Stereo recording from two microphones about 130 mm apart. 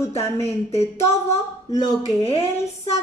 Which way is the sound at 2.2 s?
45° left (ahead or behind).